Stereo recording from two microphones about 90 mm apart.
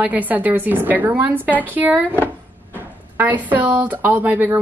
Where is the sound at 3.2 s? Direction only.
20° right (ahead or behind).